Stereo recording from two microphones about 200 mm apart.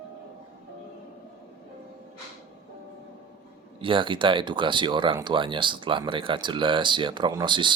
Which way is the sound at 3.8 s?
25° right (ahead or behind).